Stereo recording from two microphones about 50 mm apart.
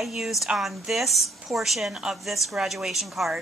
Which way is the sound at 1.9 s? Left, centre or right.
Centre.